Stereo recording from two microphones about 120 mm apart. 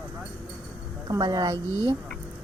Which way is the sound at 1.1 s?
35° right (ahead or behind).